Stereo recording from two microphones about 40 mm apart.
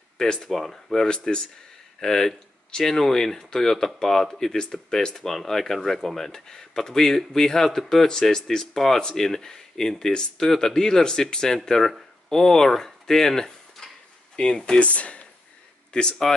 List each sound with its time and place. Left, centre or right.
0.2 s a man's voice: centre
1.0 s a man's voice: left
14.3 s speech: left
14.8 s speech: left
15.9 s speech: left